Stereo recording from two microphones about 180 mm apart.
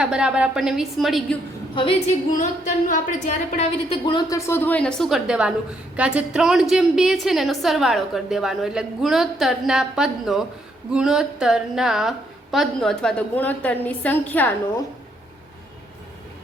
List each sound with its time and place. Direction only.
0.0 s a woman's voice: 5° right (ahead or behind)
1.7 s a woman's voice: 30° left (ahead or behind)
2.3 s speech: 45° left (ahead or behind)
4.0 s a woman's voice: 20° left (ahead or behind)